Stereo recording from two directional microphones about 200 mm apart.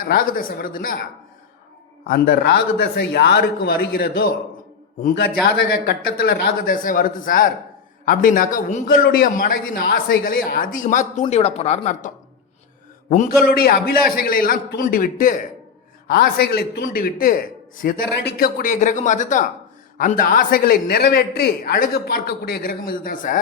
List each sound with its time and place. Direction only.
0.0 s a man's voice: 45° left (ahead or behind)
2.0 s a man's voice: 50° left (ahead or behind)